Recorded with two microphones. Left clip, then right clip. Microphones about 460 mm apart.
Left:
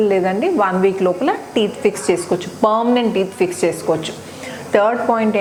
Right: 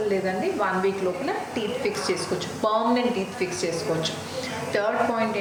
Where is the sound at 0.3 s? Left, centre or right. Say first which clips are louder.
Left 8 dB; left.